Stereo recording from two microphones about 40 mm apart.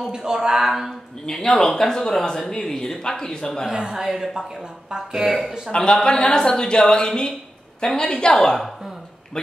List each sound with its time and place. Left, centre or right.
0.1 s speech: centre
1.2 s speech: centre
3.7 s speech: centre
5.1 s speech: centre
5.7 s a woman's voice: left